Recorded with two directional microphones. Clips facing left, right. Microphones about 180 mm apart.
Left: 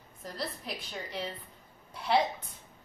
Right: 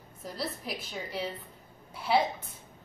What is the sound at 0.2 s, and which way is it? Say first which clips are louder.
A woman's voice: right 2 dB; centre (ahead or behind).